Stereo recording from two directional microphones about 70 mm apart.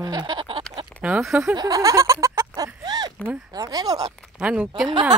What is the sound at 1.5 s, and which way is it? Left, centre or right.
Speech, right.